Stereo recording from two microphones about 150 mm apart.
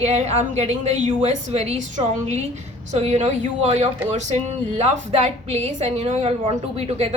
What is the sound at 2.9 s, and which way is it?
A woman's voice, 50° right (ahead or behind).